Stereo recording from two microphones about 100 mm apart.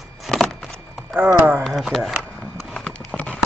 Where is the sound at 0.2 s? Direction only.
5° left (ahead or behind).